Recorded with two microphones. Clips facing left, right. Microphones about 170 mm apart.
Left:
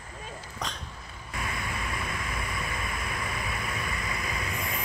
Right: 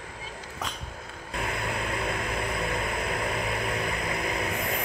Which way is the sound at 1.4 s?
65° right (ahead or behind).